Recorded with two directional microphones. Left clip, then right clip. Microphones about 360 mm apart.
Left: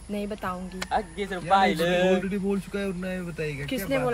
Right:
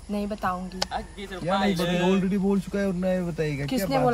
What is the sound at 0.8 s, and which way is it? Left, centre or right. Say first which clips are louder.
A man's voice: left 9 dB; centre.